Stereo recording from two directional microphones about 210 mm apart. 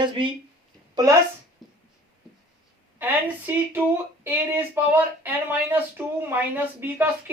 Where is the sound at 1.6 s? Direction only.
Centre (ahead or behind).